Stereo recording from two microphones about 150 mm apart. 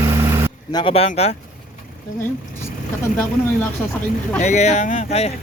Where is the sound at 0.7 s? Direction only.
40° left (ahead or behind).